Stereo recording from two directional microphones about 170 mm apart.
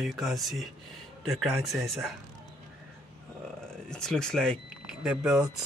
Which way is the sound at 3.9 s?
5° left (ahead or behind).